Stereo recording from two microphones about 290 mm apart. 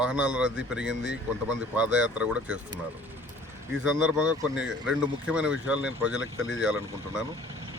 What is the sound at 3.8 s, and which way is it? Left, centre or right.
Speech, centre.